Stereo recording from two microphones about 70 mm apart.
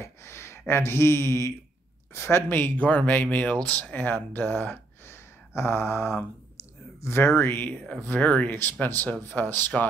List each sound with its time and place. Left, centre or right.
0.0 s speech: left
7.3 s speech: left